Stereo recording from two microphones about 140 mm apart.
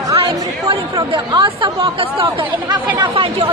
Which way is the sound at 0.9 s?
35° right (ahead or behind).